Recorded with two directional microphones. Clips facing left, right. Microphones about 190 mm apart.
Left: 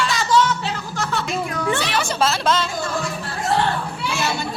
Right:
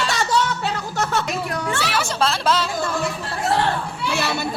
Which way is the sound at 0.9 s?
40° right (ahead or behind).